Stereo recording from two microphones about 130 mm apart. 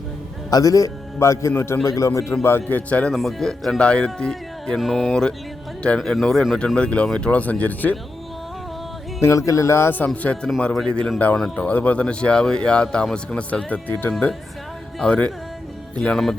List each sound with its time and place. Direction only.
0.5 s a man's voice: 25° left (ahead or behind)
9.5 s a man's voice: 20° left (ahead or behind)
10.1 s speech: 5° left (ahead or behind)